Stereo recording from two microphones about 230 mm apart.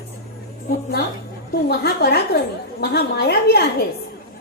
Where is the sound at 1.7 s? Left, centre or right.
Left.